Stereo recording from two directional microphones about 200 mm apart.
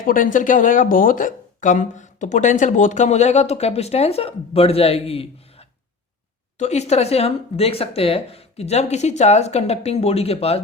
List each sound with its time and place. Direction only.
0.0 s speech: 40° left (ahead or behind)